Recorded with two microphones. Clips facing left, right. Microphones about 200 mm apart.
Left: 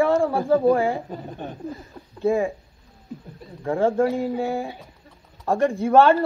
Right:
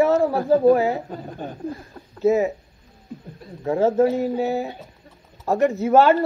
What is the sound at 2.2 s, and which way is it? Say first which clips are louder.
Speech: right 3 dB; 20° right (ahead or behind).